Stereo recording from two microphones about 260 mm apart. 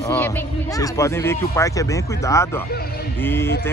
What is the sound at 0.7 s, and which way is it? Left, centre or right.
Speech, centre.